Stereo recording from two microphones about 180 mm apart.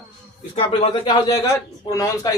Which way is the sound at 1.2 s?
15° left (ahead or behind).